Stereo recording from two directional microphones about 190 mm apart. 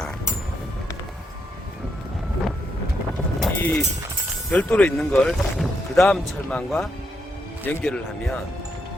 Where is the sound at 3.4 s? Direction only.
10° left (ahead or behind).